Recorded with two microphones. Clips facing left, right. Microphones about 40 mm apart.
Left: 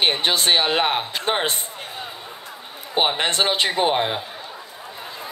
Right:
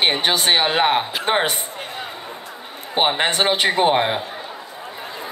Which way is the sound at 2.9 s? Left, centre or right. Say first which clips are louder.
Right 2 dB; centre.